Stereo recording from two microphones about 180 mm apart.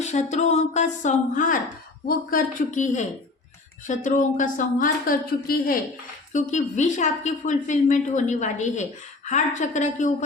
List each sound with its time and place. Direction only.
0.0 s a woman's voice: 40° left (ahead or behind); by 5.7 s 55° left (ahead or behind)
6.3 s a woman's voice: 45° left (ahead or behind)